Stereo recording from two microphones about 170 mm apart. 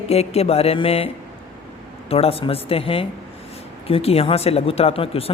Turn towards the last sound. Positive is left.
turn(degrees=35)  # may be behind; listen again after turning